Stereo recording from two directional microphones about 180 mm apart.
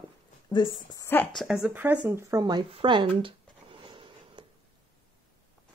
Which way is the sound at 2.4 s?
25° right (ahead or behind).